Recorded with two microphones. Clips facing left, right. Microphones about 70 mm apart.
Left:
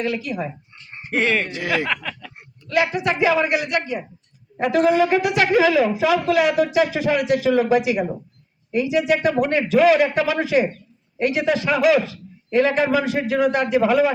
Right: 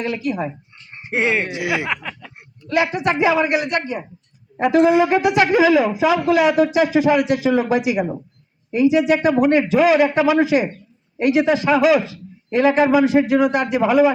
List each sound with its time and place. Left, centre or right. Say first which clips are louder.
0.0 s speech: right 2 dB; right
3.2 s speech: right 1 dB; centre
3.7 s speech: right 1 dB; right
4.5 s speech: right 3 dB; centre
12.0 s speech: even; right